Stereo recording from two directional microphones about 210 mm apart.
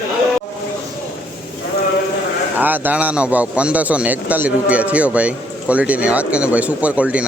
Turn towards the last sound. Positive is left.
turn(degrees=-5)  # may be behind; listen again after turning